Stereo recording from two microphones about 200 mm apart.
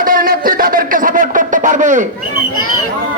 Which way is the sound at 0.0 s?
45° right (ahead or behind).